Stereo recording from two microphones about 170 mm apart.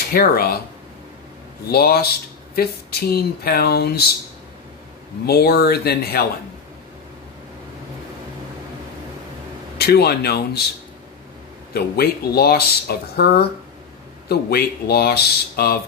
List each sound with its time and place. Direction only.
0.1 s speech: 60° left (ahead or behind)
1.7 s speech: 65° left (ahead or behind)
5.2 s speech: 70° left (ahead or behind)
9.8 s speech: 70° left (ahead or behind)
11.7 s speech: 65° left (ahead or behind)